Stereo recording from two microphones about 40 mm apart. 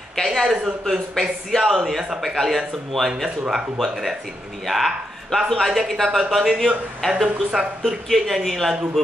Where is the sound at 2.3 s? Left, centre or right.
Centre.